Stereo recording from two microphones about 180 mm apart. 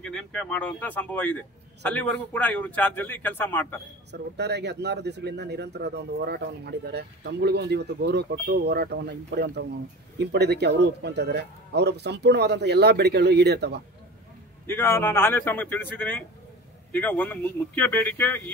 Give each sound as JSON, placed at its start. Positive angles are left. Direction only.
{"t": 0.0, "sound": "a man's voice", "side_deg": 5}
{"t": 4.1, "sound": "speech", "side_deg": -70}
{"t": 14.7, "sound": "a man's voice", "side_deg": 15}